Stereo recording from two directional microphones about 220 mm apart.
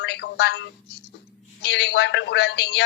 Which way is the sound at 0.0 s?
50° left (ahead or behind).